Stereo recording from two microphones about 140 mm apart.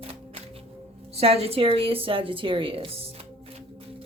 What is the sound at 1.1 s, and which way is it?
A woman's voice, 45° right (ahead or behind).